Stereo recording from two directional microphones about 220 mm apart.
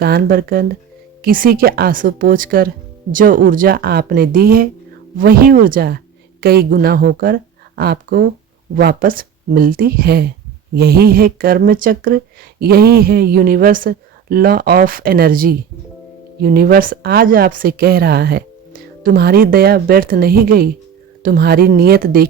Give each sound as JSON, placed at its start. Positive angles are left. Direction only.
{"t": 0.0, "sound": "speech", "side_deg": -45}